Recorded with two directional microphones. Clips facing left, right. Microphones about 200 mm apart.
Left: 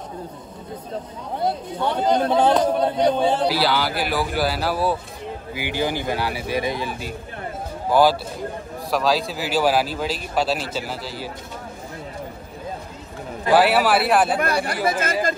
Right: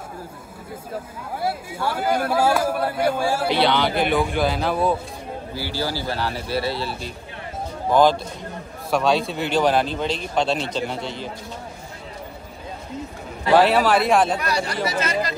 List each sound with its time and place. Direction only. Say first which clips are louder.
1.4 s speech: left 2 dB; 5° right (ahead or behind)
3.4 s speech: right 1 dB; 5° left (ahead or behind)
5.5 s a man's voice: left 3 dB; 15° left (ahead or behind)
13.5 s a man's voice: right 1 dB; 10° left (ahead or behind)
14.4 s speech: left 2 dB; 55° left (ahead or behind)